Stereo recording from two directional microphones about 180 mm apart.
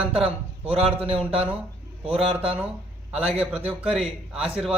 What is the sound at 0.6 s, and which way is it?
Speech, 35° right (ahead or behind).